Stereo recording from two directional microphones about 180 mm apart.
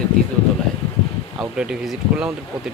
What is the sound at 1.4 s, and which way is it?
Speech, 5° right (ahead or behind).